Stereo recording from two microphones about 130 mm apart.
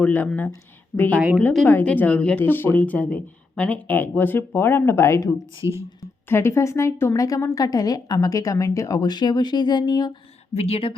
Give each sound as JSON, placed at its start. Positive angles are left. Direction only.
{"t": 0.0, "sound": "a woman's voice", "side_deg": 10}
{"t": 10.5, "sound": "speech", "side_deg": 50}